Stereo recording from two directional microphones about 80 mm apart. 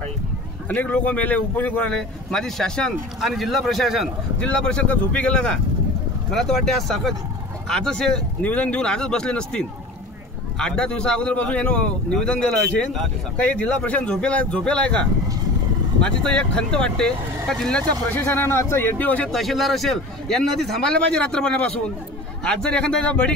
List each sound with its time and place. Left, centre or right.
0.7 s speech: centre
3.2 s a man's voice: centre
4.4 s a man's voice: centre
8.4 s speech: centre
18.1 s a man's voice: left
19.3 s a man's voice: centre